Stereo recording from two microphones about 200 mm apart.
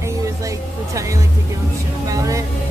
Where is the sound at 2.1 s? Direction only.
15° right (ahead or behind).